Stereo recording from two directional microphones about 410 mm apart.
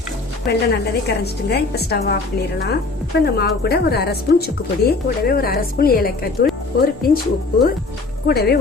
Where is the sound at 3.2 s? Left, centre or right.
Left.